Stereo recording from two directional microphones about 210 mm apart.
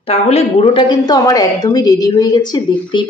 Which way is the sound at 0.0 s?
30° left (ahead or behind).